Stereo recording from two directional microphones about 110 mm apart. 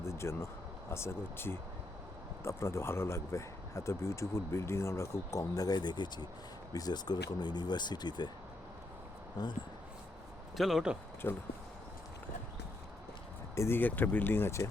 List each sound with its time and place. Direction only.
0.0 s a sound: 25° left (ahead or behind)
0.9 s speech: 25° left (ahead or behind); by 8.3 s 40° left (ahead or behind)
9.4 s speech: 40° left (ahead or behind)
10.6 s speech: centre (ahead or behind)
11.2 s speech: 20° left (ahead or behind)
13.6 s speech: 20° left (ahead or behind)